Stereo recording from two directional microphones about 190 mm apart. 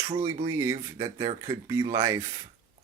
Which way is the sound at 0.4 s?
15° right (ahead or behind).